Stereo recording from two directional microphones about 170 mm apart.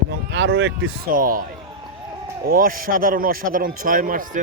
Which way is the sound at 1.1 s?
55° right (ahead or behind).